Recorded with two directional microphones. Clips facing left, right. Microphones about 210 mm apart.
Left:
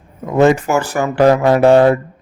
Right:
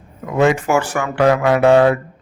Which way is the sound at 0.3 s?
40° left (ahead or behind).